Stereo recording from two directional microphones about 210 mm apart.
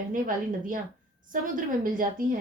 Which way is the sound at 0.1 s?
40° right (ahead or behind).